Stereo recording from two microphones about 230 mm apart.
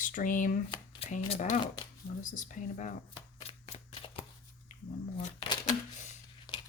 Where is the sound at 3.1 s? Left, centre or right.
Left.